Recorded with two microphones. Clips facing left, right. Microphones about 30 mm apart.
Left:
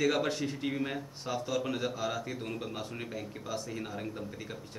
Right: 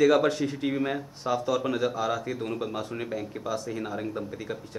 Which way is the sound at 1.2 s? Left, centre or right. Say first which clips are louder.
Right 7 dB; centre.